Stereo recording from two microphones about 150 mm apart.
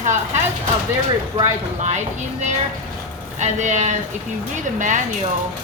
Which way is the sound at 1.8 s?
50° right (ahead or behind).